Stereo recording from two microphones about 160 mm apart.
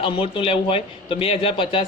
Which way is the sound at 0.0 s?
35° left (ahead or behind).